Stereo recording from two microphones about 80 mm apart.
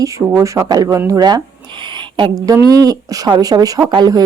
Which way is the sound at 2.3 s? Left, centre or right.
Right.